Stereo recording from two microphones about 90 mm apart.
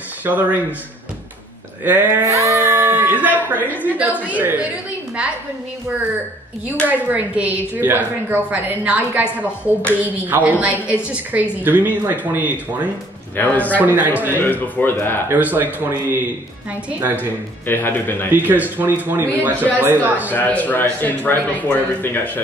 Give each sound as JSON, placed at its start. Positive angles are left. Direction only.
{"t": 0.2, "sound": "speech", "side_deg": -20}
{"t": 1.9, "sound": "a woman's voice", "side_deg": -20}
{"t": 2.2, "sound": "a sound", "side_deg": -35}
{"t": 4.0, "sound": "a woman's voice", "side_deg": -15}
{"t": 6.9, "sound": "a woman's voice", "side_deg": -15}
{"t": 13.4, "sound": "a man's voice", "side_deg": 15}
{"t": 13.7, "sound": "a woman's voice", "side_deg": -20}
{"t": 14.4, "sound": "speech", "side_deg": 20}
{"t": 15.2, "sound": "a woman's voice", "side_deg": -20}
{"t": 17.6, "sound": "speech", "side_deg": 25}
{"t": 18.3, "sound": "a woman's voice", "side_deg": -20}
{"t": 20.2, "sound": "speech", "side_deg": 20}